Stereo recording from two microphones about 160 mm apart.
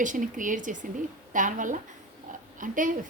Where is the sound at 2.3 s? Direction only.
55° right (ahead or behind).